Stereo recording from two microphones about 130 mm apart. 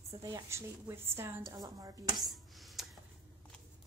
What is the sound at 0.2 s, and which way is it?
A woman's voice, 25° right (ahead or behind).